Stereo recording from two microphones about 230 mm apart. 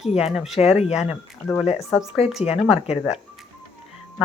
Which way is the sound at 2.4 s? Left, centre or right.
Left.